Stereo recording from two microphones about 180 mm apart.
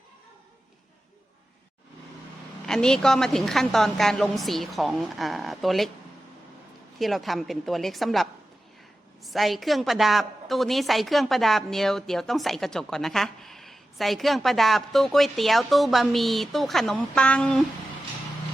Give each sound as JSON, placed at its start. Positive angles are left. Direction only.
{"t": 2.6, "sound": "a woman's voice", "side_deg": 5}
{"t": 7.0, "sound": "a woman's voice", "side_deg": 0}